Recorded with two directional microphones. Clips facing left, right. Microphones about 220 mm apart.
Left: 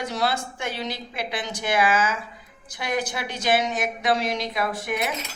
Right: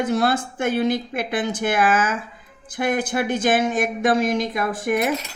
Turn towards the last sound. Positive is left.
turn(degrees=-50)  # may be behind; listen again after turning